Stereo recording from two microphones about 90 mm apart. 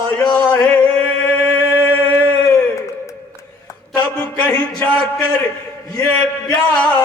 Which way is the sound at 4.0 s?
20° left (ahead or behind).